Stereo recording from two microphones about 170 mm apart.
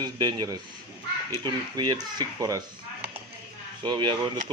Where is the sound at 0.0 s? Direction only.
25° right (ahead or behind).